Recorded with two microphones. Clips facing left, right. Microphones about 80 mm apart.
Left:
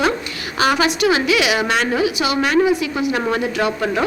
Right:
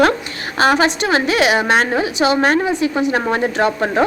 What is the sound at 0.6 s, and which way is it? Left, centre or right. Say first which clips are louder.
A woman's voice: right 2 dB; right.